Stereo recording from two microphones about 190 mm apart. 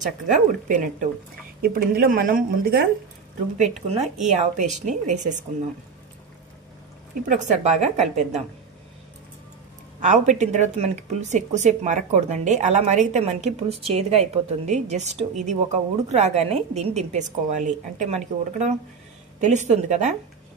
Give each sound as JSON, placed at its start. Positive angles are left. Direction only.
{"t": 1.6, "sound": "speech", "side_deg": -50}
{"t": 3.5, "sound": "speech", "side_deg": -40}
{"t": 7.2, "sound": "speech", "side_deg": -40}
{"t": 9.9, "sound": "speech", "side_deg": -40}